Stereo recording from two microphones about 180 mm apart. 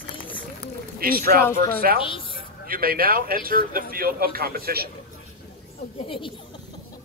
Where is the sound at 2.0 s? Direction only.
30° left (ahead or behind).